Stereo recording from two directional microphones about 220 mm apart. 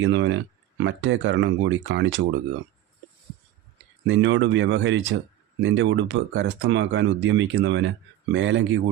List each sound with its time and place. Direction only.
0.0 s speech: 55° right (ahead or behind)
4.0 s speech: 55° right (ahead or behind)